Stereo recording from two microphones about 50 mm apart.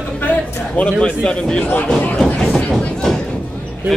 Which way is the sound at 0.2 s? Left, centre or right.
Left.